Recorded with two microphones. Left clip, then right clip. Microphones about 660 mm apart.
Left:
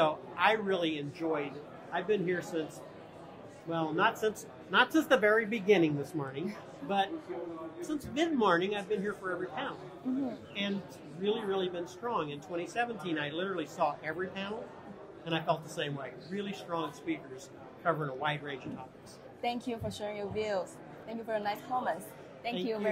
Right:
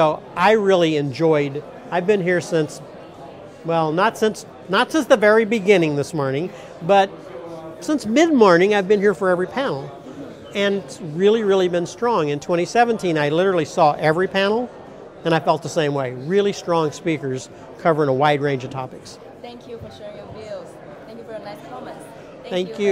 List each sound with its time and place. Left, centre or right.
0.0 s speech: right
3.7 s speech: right
7.8 s speech: right
11.2 s speech: right
20.0 s speech: left
22.5 s speech: right